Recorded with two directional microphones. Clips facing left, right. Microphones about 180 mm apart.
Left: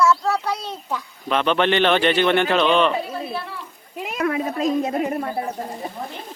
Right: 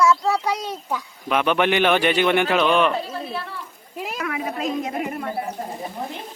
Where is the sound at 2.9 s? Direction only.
5° left (ahead or behind).